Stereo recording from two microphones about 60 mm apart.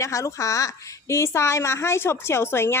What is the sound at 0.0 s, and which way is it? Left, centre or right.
A woman's voice, left.